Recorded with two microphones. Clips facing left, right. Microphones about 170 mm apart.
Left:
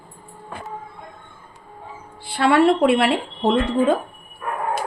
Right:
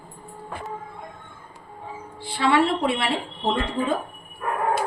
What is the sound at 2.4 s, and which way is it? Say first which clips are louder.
Speech: left 5 dB; 60° left (ahead or behind).